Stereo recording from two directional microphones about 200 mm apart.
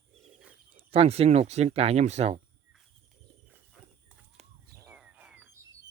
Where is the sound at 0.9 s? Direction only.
30° right (ahead or behind).